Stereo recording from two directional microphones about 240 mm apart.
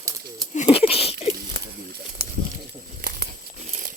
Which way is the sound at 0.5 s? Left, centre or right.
Left.